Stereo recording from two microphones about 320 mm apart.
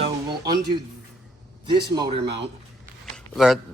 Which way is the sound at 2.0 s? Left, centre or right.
Centre.